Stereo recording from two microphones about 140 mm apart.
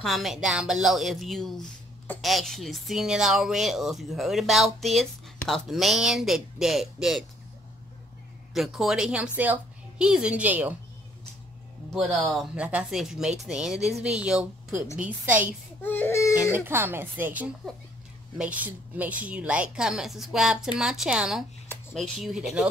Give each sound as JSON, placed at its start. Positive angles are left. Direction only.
{"t": 0.0, "sound": "speech", "side_deg": 0}
{"t": 8.5, "sound": "a woman's voice", "side_deg": 0}
{"t": 11.9, "sound": "speech", "side_deg": 0}
{"t": 15.8, "sound": "baby cry", "side_deg": 15}
{"t": 16.5, "sound": "speech", "side_deg": -15}